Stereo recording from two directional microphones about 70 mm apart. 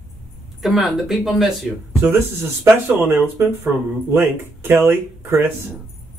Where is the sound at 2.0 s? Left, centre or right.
Right.